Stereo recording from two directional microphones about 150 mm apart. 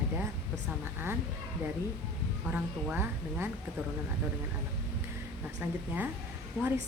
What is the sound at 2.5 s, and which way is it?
A woman's voice, 10° right (ahead or behind).